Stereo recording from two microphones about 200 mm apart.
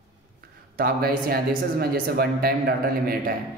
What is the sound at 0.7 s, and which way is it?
A man's voice, 50° right (ahead or behind).